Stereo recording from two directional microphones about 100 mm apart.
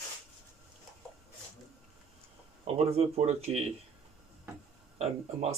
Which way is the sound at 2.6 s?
90° right.